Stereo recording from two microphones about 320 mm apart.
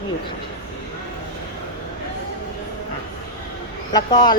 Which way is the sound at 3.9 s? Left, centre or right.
Centre.